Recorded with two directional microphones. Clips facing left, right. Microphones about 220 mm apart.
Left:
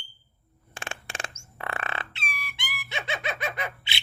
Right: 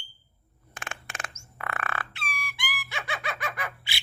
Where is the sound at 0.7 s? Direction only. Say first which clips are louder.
Left 3 dB; 30° left (ahead or behind).